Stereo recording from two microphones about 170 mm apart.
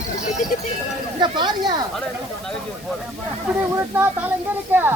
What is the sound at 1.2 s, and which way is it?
Speech, 25° right (ahead or behind).